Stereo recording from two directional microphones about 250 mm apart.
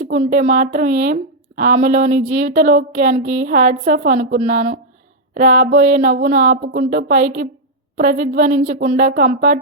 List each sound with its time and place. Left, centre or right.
0.0 s a woman's voice: right